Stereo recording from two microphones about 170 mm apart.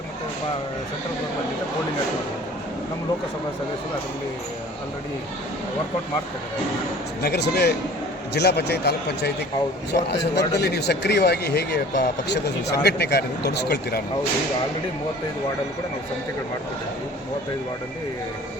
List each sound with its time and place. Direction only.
7.2 s speech: 75° left (ahead or behind)